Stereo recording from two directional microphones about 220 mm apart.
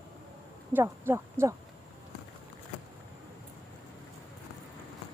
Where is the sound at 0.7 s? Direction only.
10° right (ahead or behind).